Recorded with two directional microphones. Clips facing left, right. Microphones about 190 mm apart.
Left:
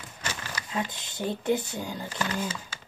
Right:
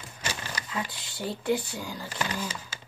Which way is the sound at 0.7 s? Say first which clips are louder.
Left 5 dB; 25° left (ahead or behind).